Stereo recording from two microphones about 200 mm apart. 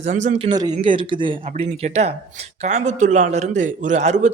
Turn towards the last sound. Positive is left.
turn(degrees=-35)  # may be behind; listen again after turning